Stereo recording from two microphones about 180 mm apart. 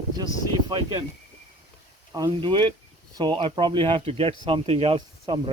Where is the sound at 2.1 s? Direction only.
25° right (ahead or behind).